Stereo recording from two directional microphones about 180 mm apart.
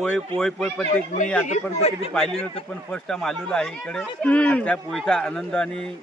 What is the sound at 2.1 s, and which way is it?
Speech, 5° left (ahead or behind).